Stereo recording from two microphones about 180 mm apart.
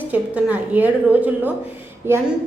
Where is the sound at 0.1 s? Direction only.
10° right (ahead or behind).